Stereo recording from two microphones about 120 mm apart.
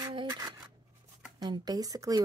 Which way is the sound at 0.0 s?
40° right (ahead or behind).